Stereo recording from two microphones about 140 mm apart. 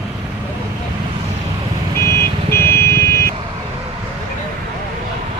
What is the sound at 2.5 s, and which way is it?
Vehicle, 20° left (ahead or behind).